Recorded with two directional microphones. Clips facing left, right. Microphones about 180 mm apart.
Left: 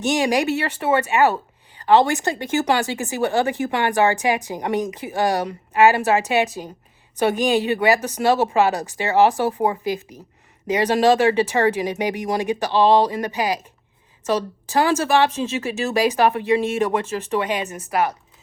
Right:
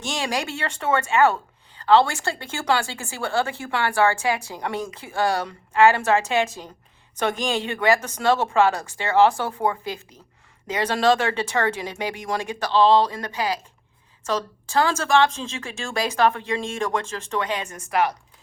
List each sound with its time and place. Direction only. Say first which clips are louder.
0.0 s speech: left 8 dB; 15° left (ahead or behind)